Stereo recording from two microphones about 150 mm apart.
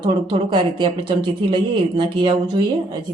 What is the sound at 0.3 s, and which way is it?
Speech, 35° right (ahead or behind).